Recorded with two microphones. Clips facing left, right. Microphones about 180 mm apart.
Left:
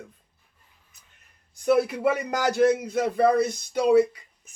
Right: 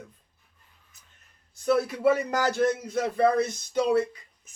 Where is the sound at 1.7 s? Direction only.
15° left (ahead or behind).